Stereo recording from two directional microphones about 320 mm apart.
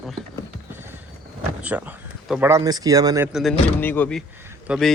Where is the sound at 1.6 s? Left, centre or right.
Centre.